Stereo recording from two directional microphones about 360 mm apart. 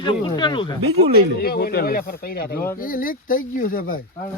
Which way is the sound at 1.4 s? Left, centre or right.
Left.